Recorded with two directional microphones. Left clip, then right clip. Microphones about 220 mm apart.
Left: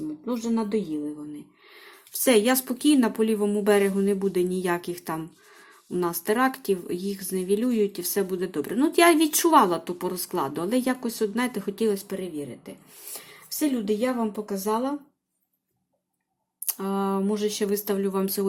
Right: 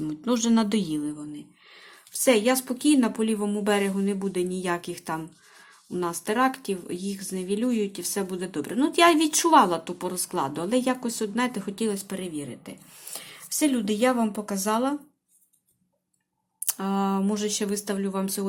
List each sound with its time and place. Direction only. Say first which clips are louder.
0.3 s a woman's voice: right 4 dB; 20° right (ahead or behind)
1.7 s speech: even; 10° left (ahead or behind); by 14.9 s 5° right (ahead or behind)
16.6 s speech: even; 5° right (ahead or behind)